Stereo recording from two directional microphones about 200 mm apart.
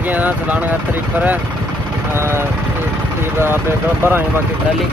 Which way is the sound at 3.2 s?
10° right (ahead or behind).